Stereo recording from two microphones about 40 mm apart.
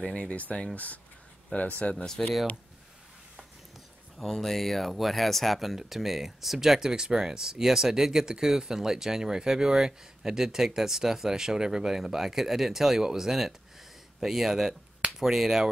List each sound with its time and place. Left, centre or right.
0.0 s speech: left
1.5 s speech: left
4.2 s speech: centre